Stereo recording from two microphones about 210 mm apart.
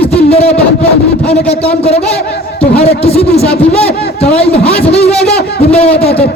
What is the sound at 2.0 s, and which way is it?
Speech, 50° left (ahead or behind).